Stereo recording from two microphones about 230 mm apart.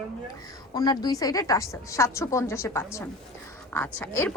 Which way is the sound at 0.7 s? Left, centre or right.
Centre.